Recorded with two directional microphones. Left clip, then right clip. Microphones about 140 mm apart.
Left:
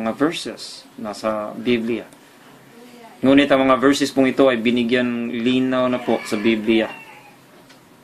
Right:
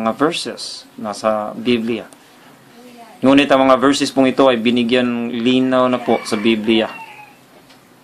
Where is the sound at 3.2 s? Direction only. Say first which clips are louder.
Right 3 dB; 20° right (ahead or behind).